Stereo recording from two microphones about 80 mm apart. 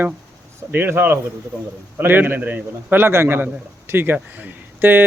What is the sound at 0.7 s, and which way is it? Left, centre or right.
A man's voice, right.